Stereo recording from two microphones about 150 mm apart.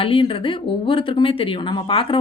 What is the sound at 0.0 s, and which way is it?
Speech, 35° left (ahead or behind).